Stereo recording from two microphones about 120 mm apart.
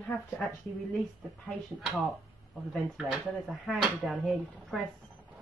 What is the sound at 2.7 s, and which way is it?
Speech, centre (ahead or behind).